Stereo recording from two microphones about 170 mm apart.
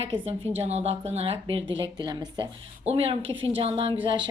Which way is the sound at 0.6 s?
40° right (ahead or behind).